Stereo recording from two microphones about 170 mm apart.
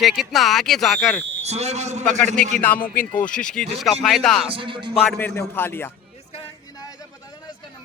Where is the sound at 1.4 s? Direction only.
40° right (ahead or behind).